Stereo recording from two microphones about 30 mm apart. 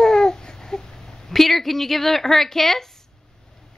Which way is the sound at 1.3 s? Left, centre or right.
Centre.